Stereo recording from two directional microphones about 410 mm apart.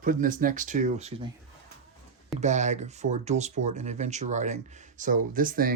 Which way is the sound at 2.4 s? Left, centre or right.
Centre.